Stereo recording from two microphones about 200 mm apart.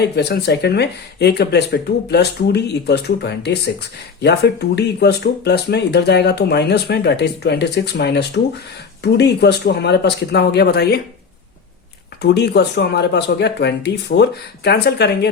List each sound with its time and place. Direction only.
0.0 s speech: 55° left (ahead or behind)
12.2 s speech: 55° left (ahead or behind)